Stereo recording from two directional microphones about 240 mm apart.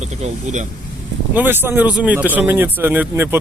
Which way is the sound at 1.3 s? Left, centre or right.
Centre.